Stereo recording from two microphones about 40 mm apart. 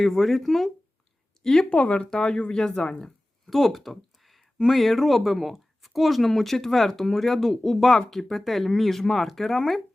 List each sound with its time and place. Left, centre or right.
0.0 s speech: centre
1.7 s speech: left
2.0 s speech: centre
3.0 s a sound: centre
4.5 s speech: centre